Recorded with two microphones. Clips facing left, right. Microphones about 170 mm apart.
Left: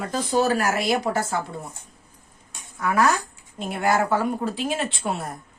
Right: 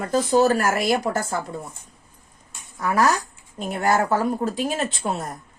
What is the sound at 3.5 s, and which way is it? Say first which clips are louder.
Speech: right 1 dB; 45° right (ahead or behind).